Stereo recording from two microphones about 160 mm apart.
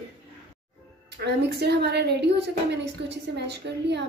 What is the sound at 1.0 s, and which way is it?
A woman's voice, 90° right.